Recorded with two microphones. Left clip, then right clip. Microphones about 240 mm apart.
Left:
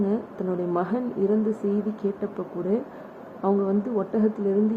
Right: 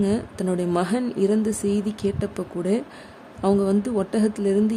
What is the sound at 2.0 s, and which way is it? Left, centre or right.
Speech, right.